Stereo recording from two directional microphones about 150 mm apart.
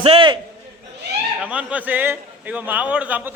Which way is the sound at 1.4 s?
10° right (ahead or behind).